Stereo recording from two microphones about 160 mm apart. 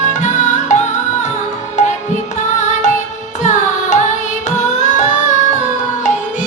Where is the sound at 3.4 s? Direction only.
50° left (ahead or behind).